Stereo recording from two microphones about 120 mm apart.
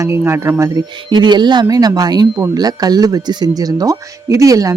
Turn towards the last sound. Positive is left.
turn(degrees=-30)  # may be behind; listen again after turning